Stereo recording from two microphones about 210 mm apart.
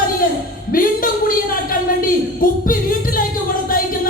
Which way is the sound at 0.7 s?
40° left (ahead or behind).